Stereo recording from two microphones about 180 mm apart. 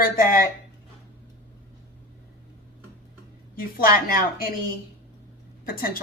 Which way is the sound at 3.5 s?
55° left (ahead or behind).